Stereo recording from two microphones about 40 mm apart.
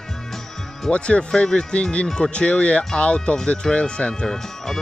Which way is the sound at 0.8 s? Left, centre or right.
Left.